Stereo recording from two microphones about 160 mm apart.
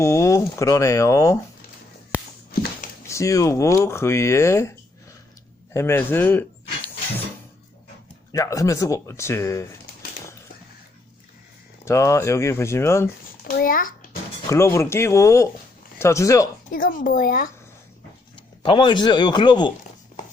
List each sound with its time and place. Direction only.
0.0 s speech: 20° left (ahead or behind)
3.1 s speech: 20° left (ahead or behind)
5.7 s speech: 15° left (ahead or behind)
8.3 s speech: 20° left (ahead or behind)
11.9 s speech: 20° left (ahead or behind)
13.5 s a sound: 60° left (ahead or behind)
14.5 s speech: 15° left (ahead or behind)
16.7 s speech: 60° left (ahead or behind)
18.6 s speech: 30° left (ahead or behind)